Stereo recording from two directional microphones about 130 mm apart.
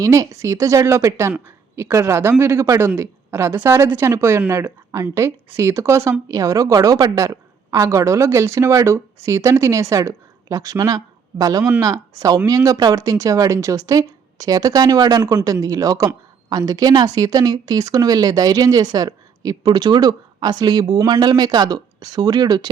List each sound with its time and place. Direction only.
0.0 s a woman's voice: 25° right (ahead or behind)